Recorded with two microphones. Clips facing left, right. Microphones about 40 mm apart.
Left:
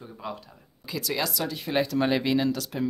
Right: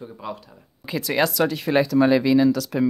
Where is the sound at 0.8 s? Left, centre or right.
Right.